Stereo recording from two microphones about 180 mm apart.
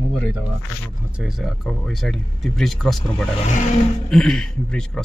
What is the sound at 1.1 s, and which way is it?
Speech, 5° right (ahead or behind).